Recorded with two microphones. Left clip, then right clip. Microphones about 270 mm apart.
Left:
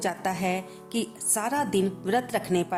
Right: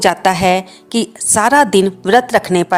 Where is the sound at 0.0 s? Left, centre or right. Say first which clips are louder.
Right 16 dB; left.